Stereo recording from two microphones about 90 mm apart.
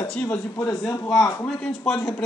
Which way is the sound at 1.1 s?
45° left (ahead or behind).